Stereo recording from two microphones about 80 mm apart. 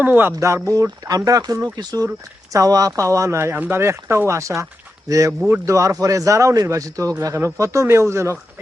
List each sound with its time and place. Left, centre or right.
0.0 s speech: right
0.3 s speech: right
2.5 s speech: right